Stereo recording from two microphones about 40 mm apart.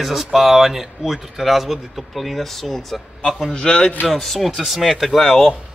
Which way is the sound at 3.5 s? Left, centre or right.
Left.